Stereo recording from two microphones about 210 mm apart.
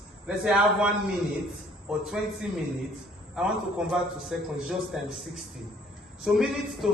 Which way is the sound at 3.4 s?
5° right (ahead or behind).